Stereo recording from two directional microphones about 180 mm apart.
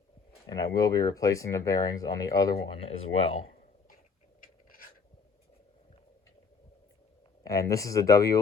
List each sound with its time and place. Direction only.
0.4 s speech: 20° left (ahead or behind)
4.4 s a sound: 50° left (ahead or behind)
7.4 s speech: 20° left (ahead or behind)